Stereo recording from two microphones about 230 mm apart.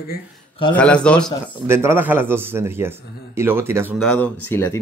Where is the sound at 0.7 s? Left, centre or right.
Centre.